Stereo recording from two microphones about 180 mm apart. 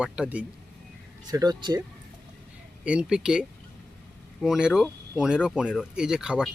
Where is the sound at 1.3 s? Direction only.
20° right (ahead or behind).